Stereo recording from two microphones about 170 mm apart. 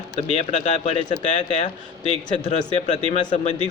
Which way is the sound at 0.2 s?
35° left (ahead or behind).